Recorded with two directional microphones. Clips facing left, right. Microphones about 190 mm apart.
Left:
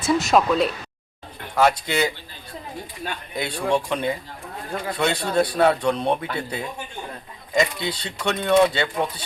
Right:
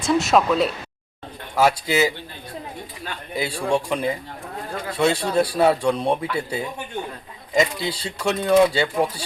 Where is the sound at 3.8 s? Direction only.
5° right (ahead or behind).